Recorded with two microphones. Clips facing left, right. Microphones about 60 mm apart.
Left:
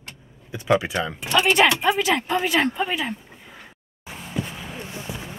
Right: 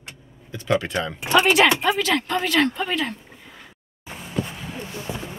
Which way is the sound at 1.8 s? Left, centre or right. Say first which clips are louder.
Left 1 dB; centre.